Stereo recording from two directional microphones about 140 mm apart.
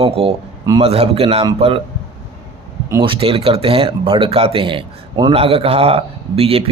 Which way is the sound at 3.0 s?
40° right (ahead or behind).